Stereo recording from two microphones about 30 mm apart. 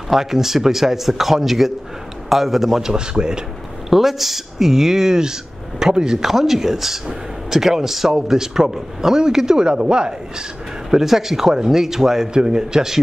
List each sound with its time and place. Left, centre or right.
0.1 s a man's voice: centre
2.8 s a man's voice: right
3.9 s speech: centre
6.2 s a man's voice: centre; by 10.1 s right
10.9 s speech: centre
12.4 s a man's voice: right